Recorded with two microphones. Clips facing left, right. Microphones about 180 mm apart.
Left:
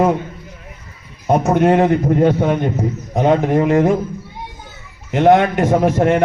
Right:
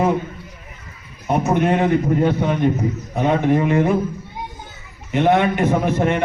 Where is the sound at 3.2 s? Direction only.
75° left (ahead or behind).